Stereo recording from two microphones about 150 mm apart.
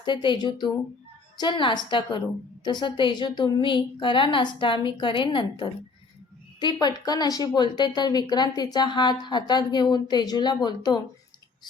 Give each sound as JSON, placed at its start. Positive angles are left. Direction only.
{"t": 0.0, "sound": "a woman's voice", "side_deg": 30}